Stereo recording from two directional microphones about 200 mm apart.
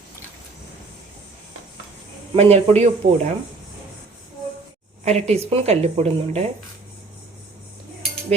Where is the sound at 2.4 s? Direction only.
30° right (ahead or behind).